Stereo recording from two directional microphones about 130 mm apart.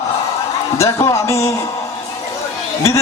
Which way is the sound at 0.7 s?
20° left (ahead or behind).